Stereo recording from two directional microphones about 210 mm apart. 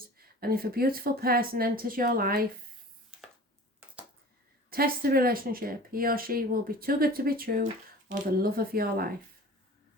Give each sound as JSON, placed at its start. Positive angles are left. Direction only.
{"t": 0.2, "sound": "speech", "side_deg": -45}
{"t": 4.7, "sound": "speech", "side_deg": -45}